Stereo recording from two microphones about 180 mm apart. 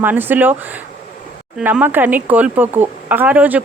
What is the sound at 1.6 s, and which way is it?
Speech, 5° right (ahead or behind).